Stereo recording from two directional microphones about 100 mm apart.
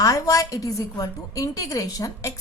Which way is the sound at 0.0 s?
35° left (ahead or behind).